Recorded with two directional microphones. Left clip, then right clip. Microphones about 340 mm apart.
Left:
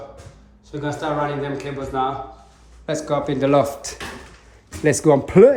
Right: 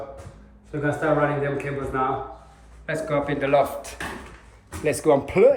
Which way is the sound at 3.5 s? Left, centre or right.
Left.